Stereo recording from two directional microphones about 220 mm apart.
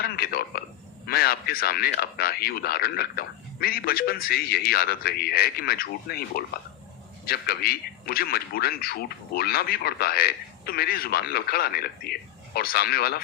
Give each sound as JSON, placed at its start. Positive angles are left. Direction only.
{"t": 0.0, "sound": "a man's voice", "side_deg": 45}